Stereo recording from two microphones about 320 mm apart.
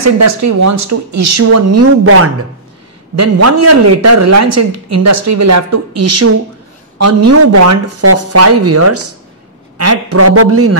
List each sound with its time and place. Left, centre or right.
0.0 s speech: right